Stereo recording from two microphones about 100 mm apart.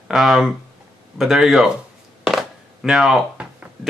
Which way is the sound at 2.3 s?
5° right (ahead or behind).